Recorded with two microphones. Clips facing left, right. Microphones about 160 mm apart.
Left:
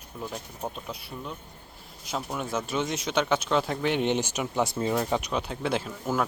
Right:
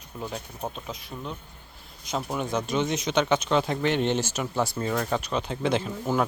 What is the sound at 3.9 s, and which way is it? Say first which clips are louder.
Speech: left 2 dB; 15° left (ahead or behind).